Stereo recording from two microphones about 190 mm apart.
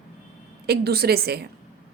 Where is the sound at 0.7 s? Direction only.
55° right (ahead or behind).